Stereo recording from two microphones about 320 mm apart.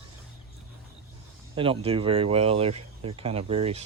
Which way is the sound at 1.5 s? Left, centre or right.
Centre.